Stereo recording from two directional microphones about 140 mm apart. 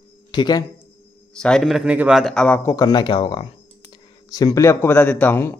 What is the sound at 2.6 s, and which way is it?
Speech, 25° left (ahead or behind).